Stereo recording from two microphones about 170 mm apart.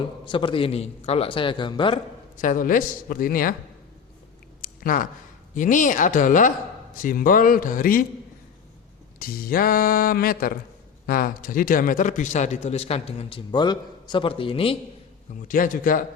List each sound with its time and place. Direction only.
0.0 s a man's voice: 30° left (ahead or behind)
2.4 s speech: 50° left (ahead or behind)
4.6 s a sound: 55° left (ahead or behind)
5.5 s a man's voice: 50° left (ahead or behind)
9.1 s a man's voice: 60° left (ahead or behind); by 14.8 s 35° left (ahead or behind)
15.4 s a man's voice: 55° left (ahead or behind)